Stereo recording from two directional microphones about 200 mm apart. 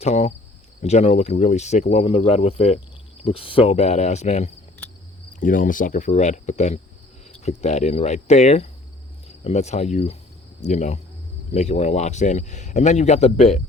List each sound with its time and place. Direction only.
0.0 s cricket: 30° left (ahead or behind)